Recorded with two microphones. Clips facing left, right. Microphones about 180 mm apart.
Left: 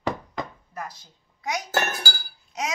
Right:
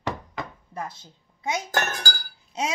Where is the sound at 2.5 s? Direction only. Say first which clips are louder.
Right 2 dB; 25° right (ahead or behind).